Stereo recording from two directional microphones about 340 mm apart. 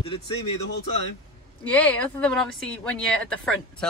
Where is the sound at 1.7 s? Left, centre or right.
Centre.